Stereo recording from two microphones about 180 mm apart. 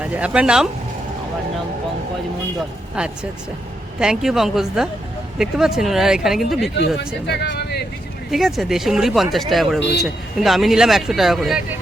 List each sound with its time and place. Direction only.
0.0 s speech: 5° right (ahead or behind)
3.0 s speech: 5° right (ahead or behind)
7.3 s a sound: 70° left (ahead or behind)
8.3 s speech: centre (ahead or behind)